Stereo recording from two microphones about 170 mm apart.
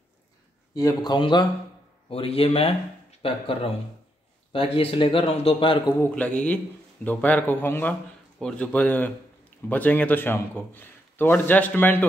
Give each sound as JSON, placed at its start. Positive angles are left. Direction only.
{"t": 0.7, "sound": "a man's voice", "side_deg": 20}
{"t": 6.1, "sound": "a man's voice", "side_deg": 5}